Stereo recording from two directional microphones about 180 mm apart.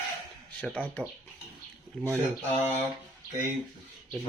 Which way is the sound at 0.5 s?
5° left (ahead or behind).